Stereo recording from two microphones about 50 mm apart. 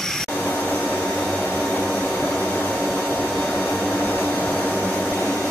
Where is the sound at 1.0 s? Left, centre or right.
Centre.